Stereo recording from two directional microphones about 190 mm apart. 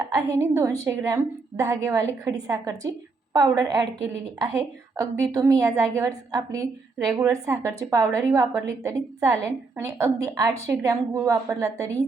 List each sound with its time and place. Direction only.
0.0 s a woman's voice: 15° right (ahead or behind)